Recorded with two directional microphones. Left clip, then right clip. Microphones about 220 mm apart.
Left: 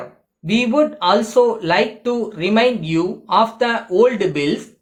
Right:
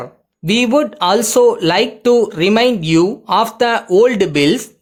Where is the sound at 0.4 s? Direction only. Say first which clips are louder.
Right 3 dB; 50° right (ahead or behind).